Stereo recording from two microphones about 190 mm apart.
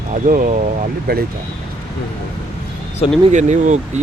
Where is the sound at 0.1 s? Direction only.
45° right (ahead or behind).